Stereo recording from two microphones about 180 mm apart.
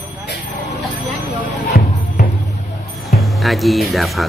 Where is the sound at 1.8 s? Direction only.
55° left (ahead or behind).